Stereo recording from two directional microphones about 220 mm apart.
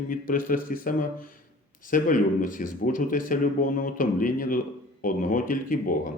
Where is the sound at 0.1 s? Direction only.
40° left (ahead or behind).